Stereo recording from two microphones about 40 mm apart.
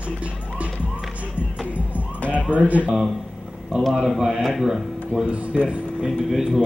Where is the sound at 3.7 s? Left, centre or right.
Right.